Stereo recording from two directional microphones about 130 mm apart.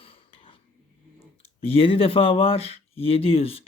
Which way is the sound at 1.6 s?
45° left (ahead or behind).